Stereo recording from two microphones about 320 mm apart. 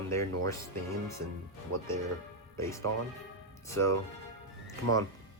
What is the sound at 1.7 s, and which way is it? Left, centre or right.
Speech, right.